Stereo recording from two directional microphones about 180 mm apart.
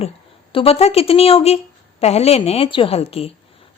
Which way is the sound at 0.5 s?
30° left (ahead or behind).